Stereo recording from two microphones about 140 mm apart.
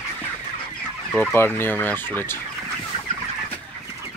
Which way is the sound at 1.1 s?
15° left (ahead or behind).